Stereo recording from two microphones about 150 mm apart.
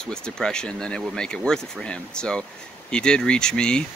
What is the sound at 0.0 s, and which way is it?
Speech, 5° left (ahead or behind).